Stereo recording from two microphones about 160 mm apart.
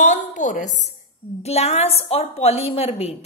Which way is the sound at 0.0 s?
50° left (ahead or behind).